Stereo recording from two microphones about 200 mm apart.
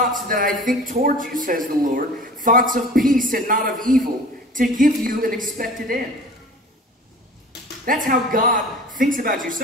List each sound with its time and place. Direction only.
0.0 s speech: 45° right (ahead or behind)
7.8 s speech: 45° right (ahead or behind)